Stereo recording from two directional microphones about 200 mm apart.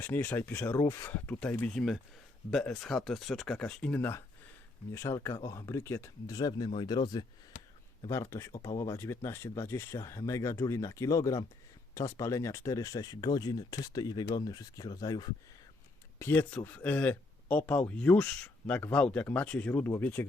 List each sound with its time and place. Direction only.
0.0 s speech: 10° left (ahead or behind)